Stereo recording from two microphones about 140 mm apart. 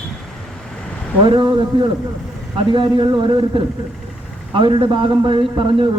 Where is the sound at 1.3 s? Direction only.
35° right (ahead or behind).